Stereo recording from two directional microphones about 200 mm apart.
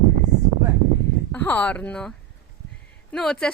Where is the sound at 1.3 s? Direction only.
10° left (ahead or behind).